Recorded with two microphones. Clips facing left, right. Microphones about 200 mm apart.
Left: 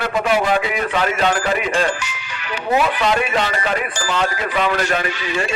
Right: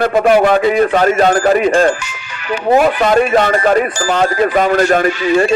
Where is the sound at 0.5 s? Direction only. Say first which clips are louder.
Right 9 dB; 40° right (ahead or behind).